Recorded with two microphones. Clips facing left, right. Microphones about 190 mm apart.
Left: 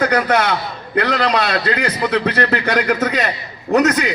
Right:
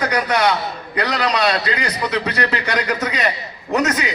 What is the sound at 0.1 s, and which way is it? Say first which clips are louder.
A man's voice: left 2 dB; 50° left (ahead or behind).